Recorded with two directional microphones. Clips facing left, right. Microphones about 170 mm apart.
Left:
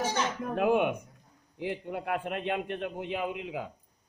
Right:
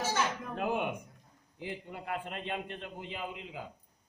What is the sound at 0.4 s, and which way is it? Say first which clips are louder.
A man's voice: left 7 dB; 55° left (ahead or behind).